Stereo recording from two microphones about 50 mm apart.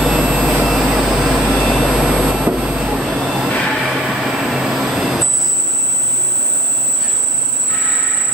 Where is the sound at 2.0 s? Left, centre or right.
Centre.